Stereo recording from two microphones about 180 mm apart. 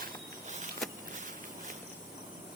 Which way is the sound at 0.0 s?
45° right (ahead or behind).